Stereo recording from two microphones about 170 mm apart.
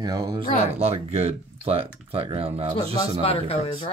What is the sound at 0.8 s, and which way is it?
Speech, 35° right (ahead or behind).